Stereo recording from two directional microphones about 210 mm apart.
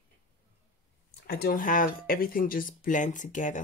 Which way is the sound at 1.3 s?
45° left (ahead or behind).